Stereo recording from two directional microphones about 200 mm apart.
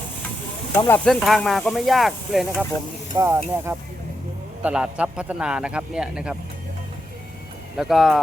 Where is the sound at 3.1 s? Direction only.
15° right (ahead or behind).